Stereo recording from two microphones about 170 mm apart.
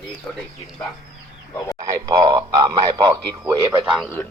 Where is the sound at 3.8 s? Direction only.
Centre (ahead or behind).